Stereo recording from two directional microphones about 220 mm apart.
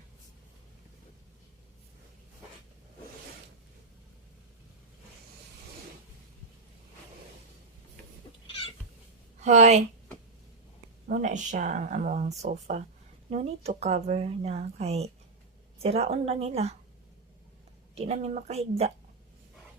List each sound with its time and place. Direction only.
9.4 s speech: 30° right (ahead or behind)
11.1 s speech: 35° right (ahead or behind)
17.9 s speech: 30° right (ahead or behind)